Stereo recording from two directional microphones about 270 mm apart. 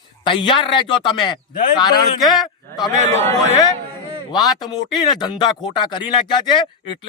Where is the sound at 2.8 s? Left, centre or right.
Centre.